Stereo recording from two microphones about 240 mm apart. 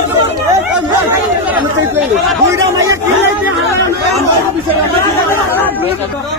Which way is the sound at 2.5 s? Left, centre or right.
Centre.